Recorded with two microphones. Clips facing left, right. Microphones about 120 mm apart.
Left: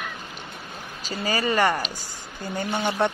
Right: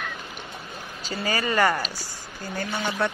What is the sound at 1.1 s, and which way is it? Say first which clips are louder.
Speech: even; 35° left (ahead or behind).